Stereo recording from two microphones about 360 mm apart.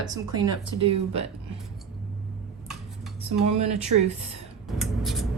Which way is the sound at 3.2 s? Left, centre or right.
Centre.